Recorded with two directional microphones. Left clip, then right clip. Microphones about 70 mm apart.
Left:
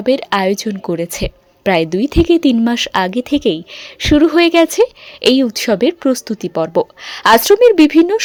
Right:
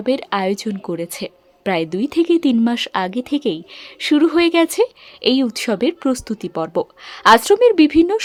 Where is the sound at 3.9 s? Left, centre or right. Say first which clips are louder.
Left 4 dB; left.